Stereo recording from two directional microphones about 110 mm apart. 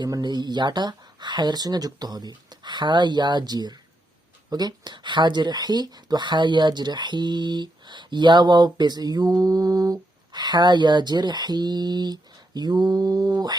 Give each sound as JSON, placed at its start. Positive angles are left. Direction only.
{"t": 0.0, "sound": "speech", "side_deg": -40}